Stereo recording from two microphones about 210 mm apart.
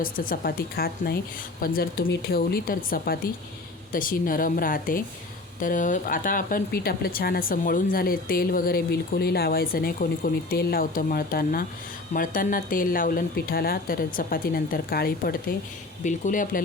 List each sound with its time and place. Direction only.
0.0 s speech: 45° left (ahead or behind)